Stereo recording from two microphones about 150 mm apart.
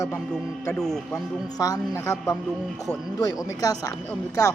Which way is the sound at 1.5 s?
25° left (ahead or behind).